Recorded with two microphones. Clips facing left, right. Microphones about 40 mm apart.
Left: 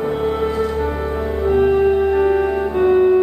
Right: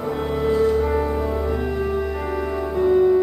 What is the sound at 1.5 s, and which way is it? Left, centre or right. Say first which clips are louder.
Music: left 9 dB; left.